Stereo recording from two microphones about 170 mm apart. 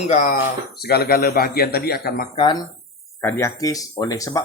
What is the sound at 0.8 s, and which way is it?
Speech, 65° left (ahead or behind).